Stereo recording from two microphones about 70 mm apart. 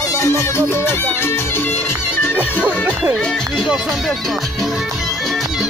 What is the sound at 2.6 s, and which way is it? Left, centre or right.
Music, left.